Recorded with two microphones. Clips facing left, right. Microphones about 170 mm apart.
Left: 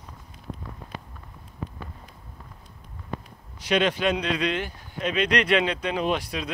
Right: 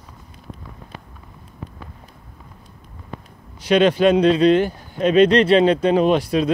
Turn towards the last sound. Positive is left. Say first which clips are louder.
# right 10 dB
turn(degrees=-35)  # may be behind; listen again after turning